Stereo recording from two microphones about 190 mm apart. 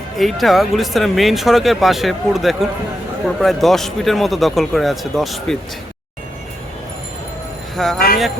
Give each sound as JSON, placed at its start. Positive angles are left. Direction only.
{"t": 0.2, "sound": "speech", "side_deg": 0}
{"t": 7.9, "sound": "speech", "side_deg": 50}